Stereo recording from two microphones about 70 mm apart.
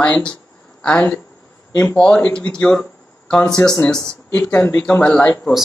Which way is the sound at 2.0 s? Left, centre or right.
Centre.